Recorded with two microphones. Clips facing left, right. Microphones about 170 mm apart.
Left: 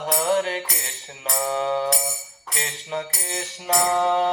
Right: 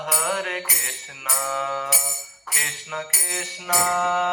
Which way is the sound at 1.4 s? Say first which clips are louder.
Left 5 dB; 30° left (ahead or behind).